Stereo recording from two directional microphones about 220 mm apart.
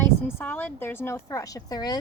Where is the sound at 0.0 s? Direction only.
10° left (ahead or behind).